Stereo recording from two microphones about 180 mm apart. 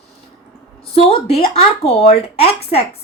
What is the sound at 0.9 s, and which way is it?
Speech, 30° left (ahead or behind).